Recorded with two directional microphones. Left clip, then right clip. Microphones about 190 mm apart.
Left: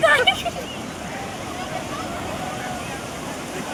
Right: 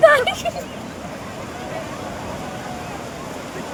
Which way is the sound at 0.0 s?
55° right (ahead or behind).